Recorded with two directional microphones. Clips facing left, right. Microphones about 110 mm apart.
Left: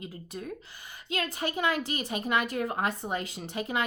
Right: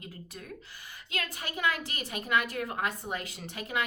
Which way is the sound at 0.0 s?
25° left (ahead or behind).